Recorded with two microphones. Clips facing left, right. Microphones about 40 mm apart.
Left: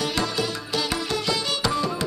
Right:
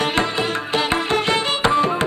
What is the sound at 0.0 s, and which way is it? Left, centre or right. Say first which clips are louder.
Music: right 5 dB; right.